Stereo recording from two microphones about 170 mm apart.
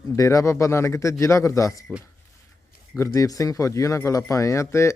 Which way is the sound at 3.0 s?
20° left (ahead or behind).